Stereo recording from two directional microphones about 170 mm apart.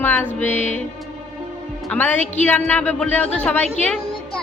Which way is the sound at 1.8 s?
10° left (ahead or behind).